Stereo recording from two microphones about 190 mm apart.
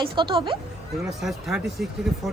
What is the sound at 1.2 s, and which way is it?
Speech, centre (ahead or behind).